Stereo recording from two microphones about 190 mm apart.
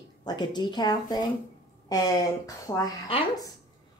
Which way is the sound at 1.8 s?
20° left (ahead or behind).